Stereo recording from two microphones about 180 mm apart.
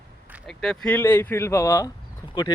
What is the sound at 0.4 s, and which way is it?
A man's voice, 5° left (ahead or behind).